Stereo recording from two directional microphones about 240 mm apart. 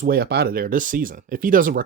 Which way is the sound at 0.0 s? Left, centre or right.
Right.